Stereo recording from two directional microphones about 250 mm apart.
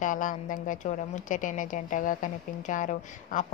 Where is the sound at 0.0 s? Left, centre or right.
Left.